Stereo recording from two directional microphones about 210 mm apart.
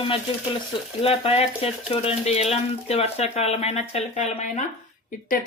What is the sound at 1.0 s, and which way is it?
Speech, 30° left (ahead or behind).